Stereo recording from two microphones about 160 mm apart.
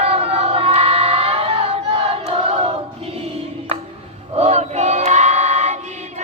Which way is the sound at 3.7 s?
40° right (ahead or behind).